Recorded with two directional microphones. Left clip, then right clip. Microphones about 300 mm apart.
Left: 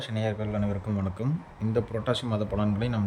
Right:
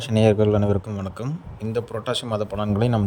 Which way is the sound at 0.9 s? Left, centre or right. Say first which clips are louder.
Right 2 dB; centre.